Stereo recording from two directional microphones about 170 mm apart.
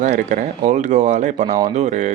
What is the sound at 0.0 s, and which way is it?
Speech, 45° right (ahead or behind).